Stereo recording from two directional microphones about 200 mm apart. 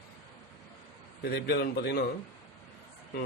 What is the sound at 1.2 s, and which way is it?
Speech, 50° left (ahead or behind).